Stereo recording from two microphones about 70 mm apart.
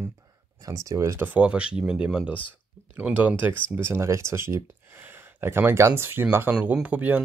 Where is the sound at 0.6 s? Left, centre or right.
Right.